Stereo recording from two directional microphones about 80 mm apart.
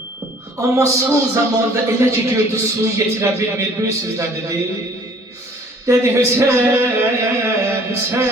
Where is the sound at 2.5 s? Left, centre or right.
Right.